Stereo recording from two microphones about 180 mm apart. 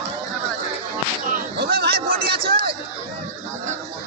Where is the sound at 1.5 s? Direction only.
60° right (ahead or behind).